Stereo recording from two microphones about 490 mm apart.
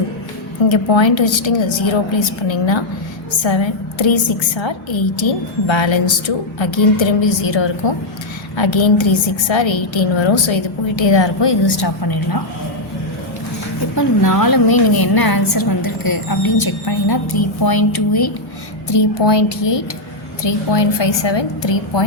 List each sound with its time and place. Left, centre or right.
0.7 s a woman's voice: left
13.9 s a woman's voice: left